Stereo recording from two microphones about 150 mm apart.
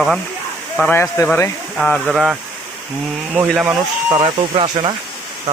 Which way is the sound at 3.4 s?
10° right (ahead or behind).